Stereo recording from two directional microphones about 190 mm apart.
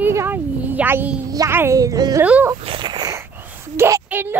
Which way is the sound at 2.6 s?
25° right (ahead or behind).